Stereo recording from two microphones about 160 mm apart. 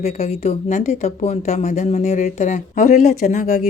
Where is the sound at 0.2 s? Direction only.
45° left (ahead or behind).